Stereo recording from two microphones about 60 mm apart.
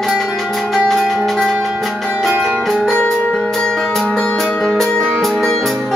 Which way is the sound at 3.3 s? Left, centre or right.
Centre.